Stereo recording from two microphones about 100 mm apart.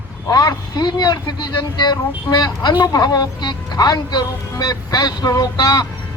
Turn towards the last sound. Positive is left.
turn(degrees=40)  # may be behind; listen again after turning